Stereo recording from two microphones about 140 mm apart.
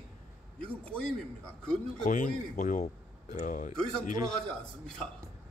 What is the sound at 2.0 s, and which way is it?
Speech, 60° left (ahead or behind).